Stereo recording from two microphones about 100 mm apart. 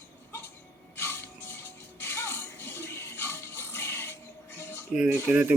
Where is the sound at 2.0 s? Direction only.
25° left (ahead or behind).